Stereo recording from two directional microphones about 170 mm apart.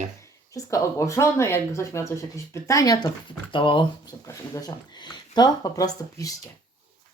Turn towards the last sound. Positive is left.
turn(degrees=20)  # may be behind; listen again after turning